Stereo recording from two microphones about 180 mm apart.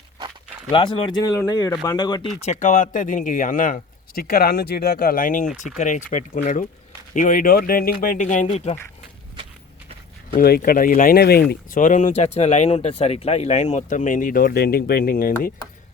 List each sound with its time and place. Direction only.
0.7 s speech: 25° left (ahead or behind)
2.4 s speech: 40° left (ahead or behind)
10.3 s speech: 55° left (ahead or behind)
11.7 s speech: 45° left (ahead or behind)